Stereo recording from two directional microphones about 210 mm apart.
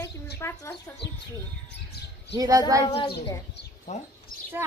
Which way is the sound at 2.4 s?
15° right (ahead or behind).